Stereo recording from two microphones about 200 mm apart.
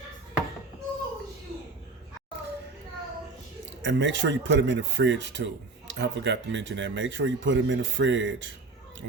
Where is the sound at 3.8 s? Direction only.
65° right (ahead or behind).